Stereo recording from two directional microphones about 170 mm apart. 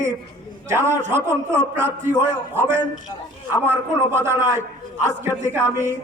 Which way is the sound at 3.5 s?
15° right (ahead or behind).